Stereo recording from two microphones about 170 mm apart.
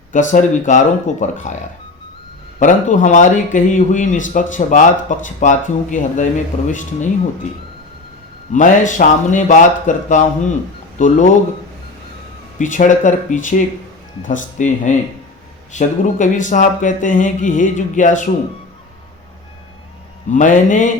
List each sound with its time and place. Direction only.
0.1 s a man's voice: 50° left (ahead or behind)
2.6 s a man's voice: 50° left (ahead or behind)
8.5 s a man's voice: 45° left (ahead or behind)
12.5 s a man's voice: 50° left (ahead or behind)
20.3 s a man's voice: 50° left (ahead or behind)